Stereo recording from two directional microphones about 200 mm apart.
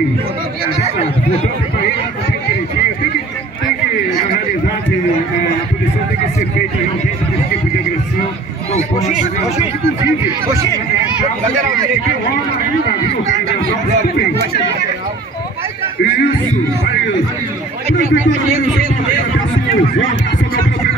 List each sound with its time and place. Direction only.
10.5 s speech: 15° right (ahead or behind)
17.8 s a man's voice: 35° right (ahead or behind)